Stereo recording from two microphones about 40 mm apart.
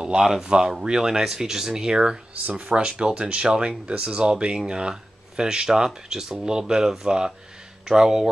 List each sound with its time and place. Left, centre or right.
0.0 s speech: centre